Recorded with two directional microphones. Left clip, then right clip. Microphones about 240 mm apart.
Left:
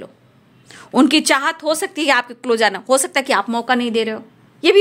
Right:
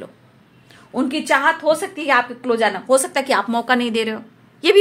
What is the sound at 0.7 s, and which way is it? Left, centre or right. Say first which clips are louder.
A woman's voice: left 9 dB; left.